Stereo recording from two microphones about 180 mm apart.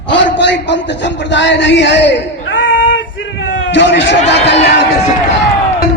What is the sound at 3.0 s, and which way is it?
A man's voice, 90° left.